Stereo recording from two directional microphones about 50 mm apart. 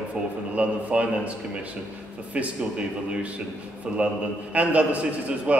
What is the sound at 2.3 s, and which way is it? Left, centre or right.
Speech, right.